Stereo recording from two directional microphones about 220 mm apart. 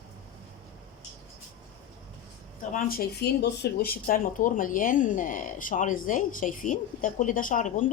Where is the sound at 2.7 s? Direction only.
45° left (ahead or behind).